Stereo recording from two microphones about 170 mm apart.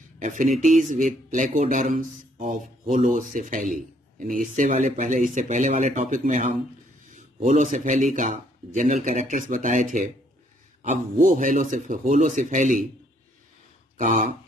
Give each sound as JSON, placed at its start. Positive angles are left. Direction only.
{"t": 0.2, "sound": "speech", "side_deg": -50}
{"t": 13.9, "sound": "speech", "side_deg": -50}